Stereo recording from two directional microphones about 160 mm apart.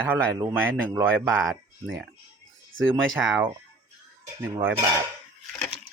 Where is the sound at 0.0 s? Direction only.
15° right (ahead or behind).